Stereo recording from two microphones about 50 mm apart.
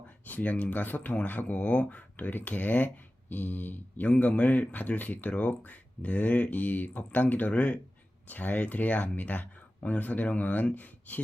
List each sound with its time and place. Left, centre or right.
0.3 s speech: left